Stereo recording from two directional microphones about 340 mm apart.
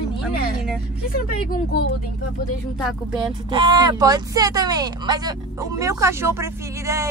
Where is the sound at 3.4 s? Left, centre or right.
Centre.